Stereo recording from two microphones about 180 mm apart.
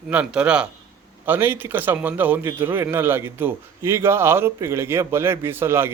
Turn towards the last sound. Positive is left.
turn(degrees=-15)  # may be behind; listen again after turning